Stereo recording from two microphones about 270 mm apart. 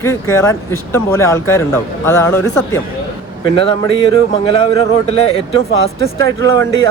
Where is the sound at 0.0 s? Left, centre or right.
Centre.